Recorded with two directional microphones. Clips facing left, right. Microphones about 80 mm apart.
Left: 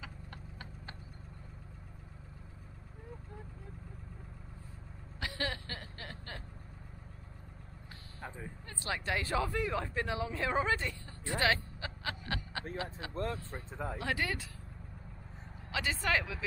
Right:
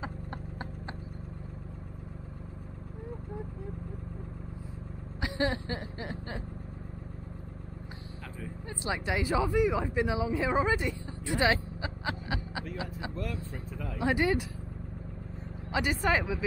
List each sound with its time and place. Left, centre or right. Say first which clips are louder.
0.0 s clip-clop: right 10 dB; right
5.2 s chuckle: right 8 dB; right
8.6 s speech: right 4 dB; centre
13.1 s speech: even; left
13.9 s speech: right 10 dB; right
15.7 s speech: right 5 dB; right